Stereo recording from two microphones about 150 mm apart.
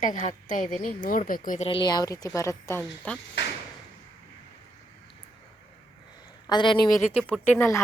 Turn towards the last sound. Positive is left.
turn(degrees=15)  # may be behind; listen again after turning